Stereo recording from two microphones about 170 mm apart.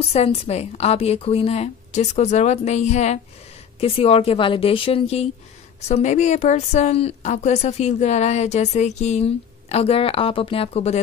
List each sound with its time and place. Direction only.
0.1 s a woman's voice: 35° left (ahead or behind)